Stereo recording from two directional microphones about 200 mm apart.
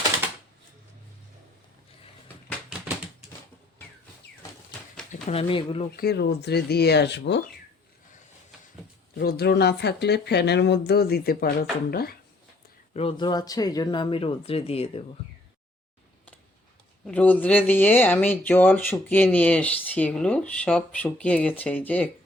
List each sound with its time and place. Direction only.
5.3 s speech: 30° left (ahead or behind)
6.0 s speech: 55° left (ahead or behind)
9.1 s speech: 50° left (ahead or behind)
12.9 s speech: 30° left (ahead or behind)
17.1 s speech: 5° left (ahead or behind)